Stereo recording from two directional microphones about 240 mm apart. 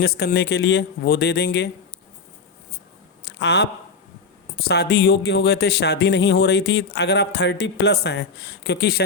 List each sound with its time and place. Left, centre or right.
0.0 s speech: left
3.2 s a sound: left
4.6 s speech: left